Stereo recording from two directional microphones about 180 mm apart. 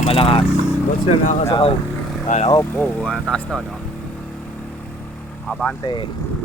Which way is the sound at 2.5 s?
15° left (ahead or behind).